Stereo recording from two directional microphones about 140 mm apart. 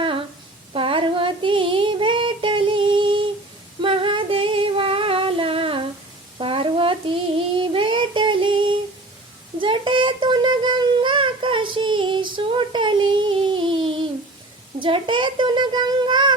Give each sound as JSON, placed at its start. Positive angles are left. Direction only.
{"t": 0.7, "sound": "female singing", "side_deg": -40}
{"t": 6.4, "sound": "child singing", "side_deg": -40}
{"t": 9.6, "sound": "a sound", "side_deg": -35}